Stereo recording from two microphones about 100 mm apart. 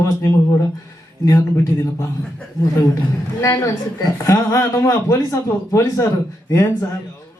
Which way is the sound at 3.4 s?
35° left (ahead or behind).